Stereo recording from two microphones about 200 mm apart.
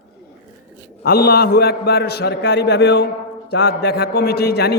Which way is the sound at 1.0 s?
50° left (ahead or behind).